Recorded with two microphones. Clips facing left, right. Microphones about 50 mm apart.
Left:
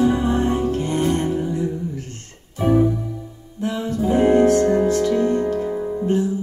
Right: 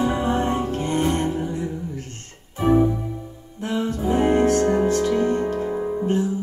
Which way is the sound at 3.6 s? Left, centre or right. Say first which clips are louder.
Left 2 dB; right.